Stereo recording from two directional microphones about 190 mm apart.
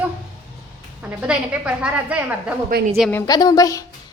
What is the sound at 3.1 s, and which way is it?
Speech, 20° left (ahead or behind).